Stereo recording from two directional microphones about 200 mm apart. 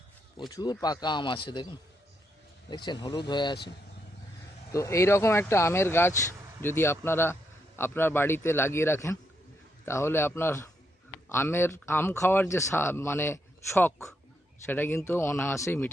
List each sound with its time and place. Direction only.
0.3 s a man's voice: 20° left (ahead or behind)
2.6 s a man's voice: 20° left (ahead or behind)
4.7 s speech: 15° left (ahead or behind)